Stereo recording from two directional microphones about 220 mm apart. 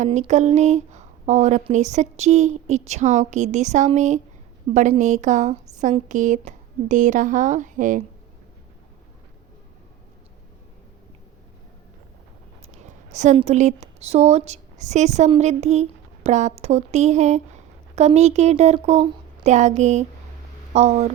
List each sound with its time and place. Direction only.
0.0 s speech: 30° right (ahead or behind)
12.7 s speech: 30° right (ahead or behind)